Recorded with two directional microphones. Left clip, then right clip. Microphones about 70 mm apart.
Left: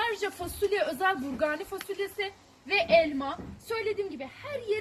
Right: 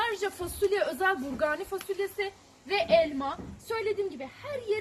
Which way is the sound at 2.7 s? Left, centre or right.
Right.